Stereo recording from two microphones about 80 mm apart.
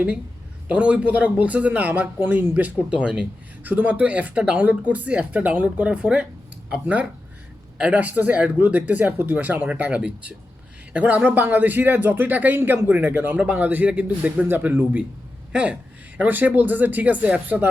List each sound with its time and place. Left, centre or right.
0.7 s speech: centre